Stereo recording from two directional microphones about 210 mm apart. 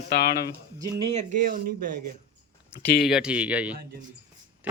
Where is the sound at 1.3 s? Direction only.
40° right (ahead or behind).